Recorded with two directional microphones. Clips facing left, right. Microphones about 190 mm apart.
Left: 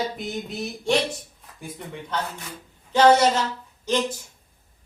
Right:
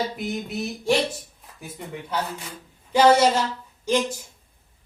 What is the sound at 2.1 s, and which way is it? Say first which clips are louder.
Speech: right 1 dB; 10° right (ahead or behind).